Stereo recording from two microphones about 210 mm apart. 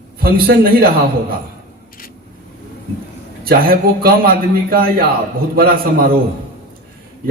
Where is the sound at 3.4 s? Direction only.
45° right (ahead or behind).